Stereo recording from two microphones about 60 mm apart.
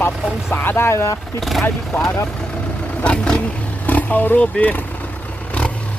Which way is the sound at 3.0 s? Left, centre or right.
Centre.